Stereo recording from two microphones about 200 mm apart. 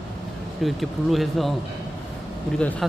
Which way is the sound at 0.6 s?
Centre (ahead or behind).